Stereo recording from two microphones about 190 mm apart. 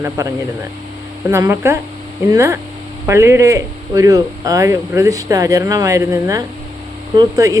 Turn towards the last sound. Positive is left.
turn(degrees=-15)  # may be behind; listen again after turning